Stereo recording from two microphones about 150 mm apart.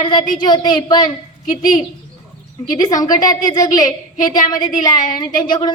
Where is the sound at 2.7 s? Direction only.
25° left (ahead or behind).